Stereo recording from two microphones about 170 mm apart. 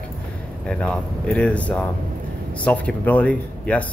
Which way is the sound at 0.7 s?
5° left (ahead or behind).